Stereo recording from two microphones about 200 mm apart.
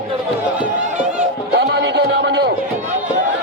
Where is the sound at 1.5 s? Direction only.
60° right (ahead or behind).